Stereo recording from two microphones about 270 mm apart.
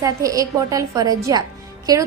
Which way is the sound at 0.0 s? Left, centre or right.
Centre.